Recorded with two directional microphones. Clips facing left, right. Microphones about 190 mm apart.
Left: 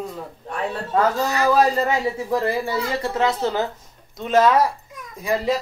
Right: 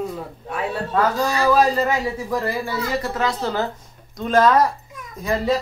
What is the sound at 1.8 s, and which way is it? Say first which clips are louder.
Speech: even; 25° left (ahead or behind).